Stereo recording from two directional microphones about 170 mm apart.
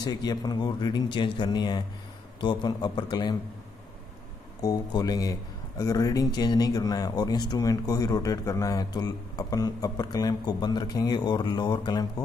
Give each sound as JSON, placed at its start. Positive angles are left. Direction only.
{"t": 0.0, "sound": "speech", "side_deg": 25}
{"t": 4.6, "sound": "speech", "side_deg": 20}